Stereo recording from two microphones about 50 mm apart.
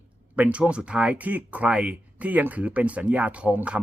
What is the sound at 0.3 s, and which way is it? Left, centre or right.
A man's voice, right.